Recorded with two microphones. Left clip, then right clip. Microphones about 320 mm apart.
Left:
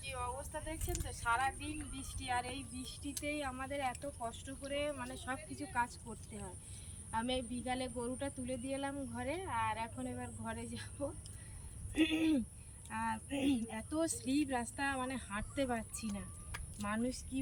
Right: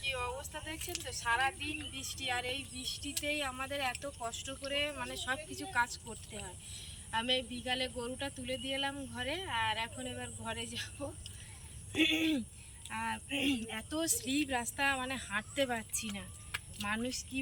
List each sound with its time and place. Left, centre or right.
0.0 s vehicle: centre
1.9 s speech: centre